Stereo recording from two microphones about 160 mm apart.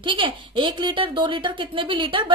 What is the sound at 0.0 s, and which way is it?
A child's voice, 30° right (ahead or behind).